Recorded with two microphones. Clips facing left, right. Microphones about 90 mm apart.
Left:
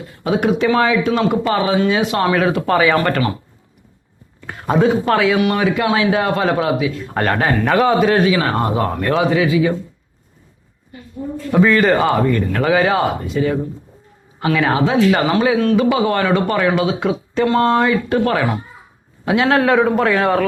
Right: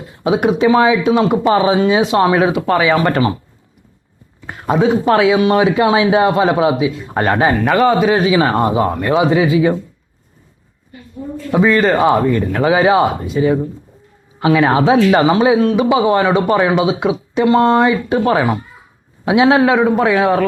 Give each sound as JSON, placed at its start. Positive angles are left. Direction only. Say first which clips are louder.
{"t": 0.3, "sound": "speech", "louder": "right 3 dB", "side_deg": -20}
{"t": 2.6, "sound": "speech", "louder": "right 1 dB", "side_deg": -5}
{"t": 4.4, "sound": "a sound", "louder": "right 2 dB", "side_deg": -15}
{"t": 4.7, "sound": "speech", "louder": "right 2 dB", "side_deg": -5}
{"t": 5.1, "sound": "speech", "louder": "right 4 dB", "side_deg": -20}
{"t": 8.1, "sound": "speech", "louder": "right 2 dB", "side_deg": -15}
{"t": 8.7, "sound": "speech", "louder": "right 3 dB", "side_deg": -10}
{"t": 9.3, "sound": "speech", "louder": "right 3 dB", "side_deg": -25}
{"t": 11.5, "sound": "speech", "louder": "right 1 dB", "side_deg": -5}